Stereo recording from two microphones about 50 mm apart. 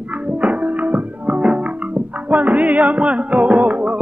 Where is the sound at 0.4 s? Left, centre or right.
Right.